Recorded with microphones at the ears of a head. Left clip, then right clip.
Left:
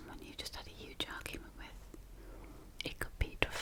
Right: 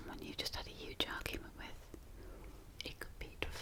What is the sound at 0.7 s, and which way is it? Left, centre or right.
Whispering, centre.